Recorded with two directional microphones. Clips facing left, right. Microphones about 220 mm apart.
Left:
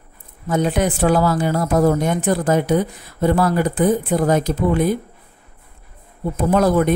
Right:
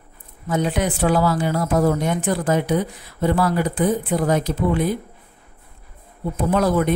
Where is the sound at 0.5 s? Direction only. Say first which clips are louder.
Left 3 dB; 45° left (ahead or behind).